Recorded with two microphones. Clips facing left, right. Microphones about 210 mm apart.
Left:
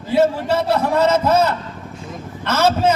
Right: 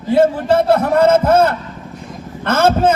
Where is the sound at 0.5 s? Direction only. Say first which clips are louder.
Right 5 dB; 50° right (ahead or behind).